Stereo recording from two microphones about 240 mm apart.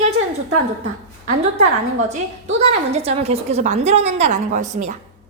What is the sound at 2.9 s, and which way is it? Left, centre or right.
A woman's voice, right.